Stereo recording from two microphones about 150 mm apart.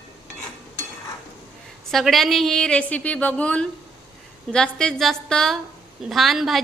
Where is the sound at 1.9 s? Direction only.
Centre (ahead or behind).